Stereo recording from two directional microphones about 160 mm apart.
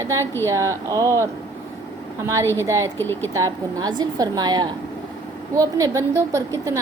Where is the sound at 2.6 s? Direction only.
20° right (ahead or behind).